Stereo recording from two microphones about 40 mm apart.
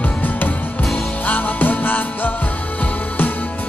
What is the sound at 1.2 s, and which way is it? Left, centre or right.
Music, left.